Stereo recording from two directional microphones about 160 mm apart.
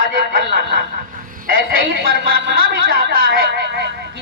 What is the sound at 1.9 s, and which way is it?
Speech, 80° right.